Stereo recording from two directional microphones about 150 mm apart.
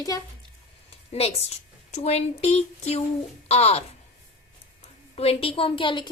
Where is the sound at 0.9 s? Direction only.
40° left (ahead or behind).